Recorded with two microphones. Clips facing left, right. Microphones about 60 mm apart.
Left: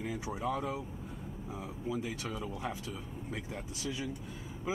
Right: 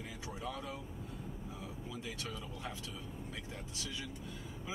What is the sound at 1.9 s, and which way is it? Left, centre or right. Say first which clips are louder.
Speech: left 8 dB; left.